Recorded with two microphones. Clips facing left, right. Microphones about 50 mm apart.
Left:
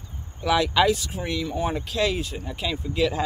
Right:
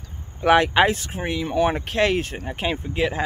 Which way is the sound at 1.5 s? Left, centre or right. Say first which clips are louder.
Right 6 dB; right.